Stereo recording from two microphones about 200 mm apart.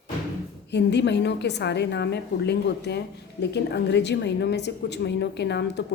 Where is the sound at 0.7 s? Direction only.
60° left (ahead or behind).